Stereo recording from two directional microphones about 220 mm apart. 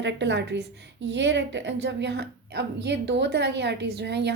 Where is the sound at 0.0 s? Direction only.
55° right (ahead or behind).